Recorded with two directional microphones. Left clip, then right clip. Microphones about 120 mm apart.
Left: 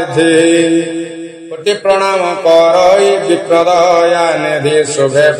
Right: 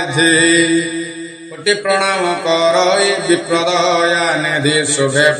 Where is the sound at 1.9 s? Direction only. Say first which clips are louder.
Left 6 dB; 20° left (ahead or behind).